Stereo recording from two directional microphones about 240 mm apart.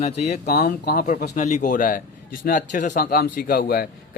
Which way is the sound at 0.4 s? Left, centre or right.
Left.